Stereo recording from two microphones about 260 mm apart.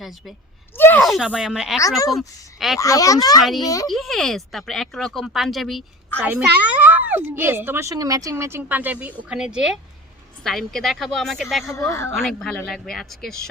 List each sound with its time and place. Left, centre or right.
0.0 s a woman's voice: centre
2.7 s speech: centre
3.4 s speech: centre